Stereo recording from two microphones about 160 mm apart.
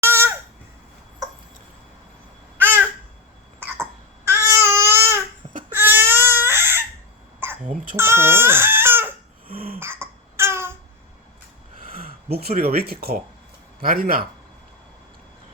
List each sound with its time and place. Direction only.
0.0 s babbling: 15° right (ahead or behind)
2.6 s babbling: 10° right (ahead or behind)
4.3 s baby cry: 15° right (ahead or behind)
7.3 s cough: 10° right (ahead or behind)
7.9 s speech: 15° right (ahead or behind)
9.5 s cough: 65° right (ahead or behind)
9.7 s babbling: 15° right (ahead or behind)
11.9 s a man's voice: 70° right (ahead or behind)